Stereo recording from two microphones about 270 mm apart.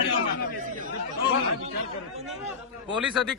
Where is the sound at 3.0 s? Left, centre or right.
Centre.